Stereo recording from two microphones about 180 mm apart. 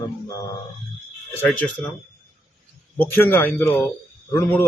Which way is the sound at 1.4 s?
10° left (ahead or behind).